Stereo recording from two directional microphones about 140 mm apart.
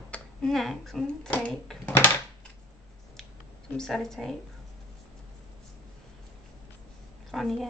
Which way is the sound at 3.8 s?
5° left (ahead or behind).